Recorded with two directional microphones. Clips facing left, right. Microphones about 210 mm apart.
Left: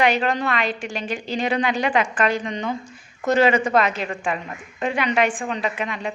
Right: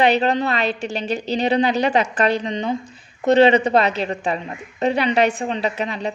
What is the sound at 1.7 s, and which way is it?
A woman's voice, 40° right (ahead or behind).